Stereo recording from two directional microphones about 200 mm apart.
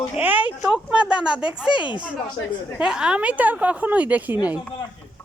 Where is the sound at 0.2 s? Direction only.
10° right (ahead or behind).